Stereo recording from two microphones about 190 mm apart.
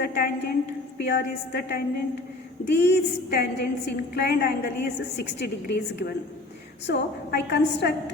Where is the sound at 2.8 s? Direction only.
60° left (ahead or behind).